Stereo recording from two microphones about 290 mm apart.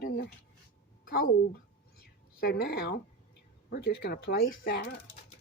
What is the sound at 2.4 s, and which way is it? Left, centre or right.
Speech, left.